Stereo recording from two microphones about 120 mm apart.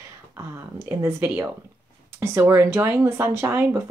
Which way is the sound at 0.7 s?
20° right (ahead or behind).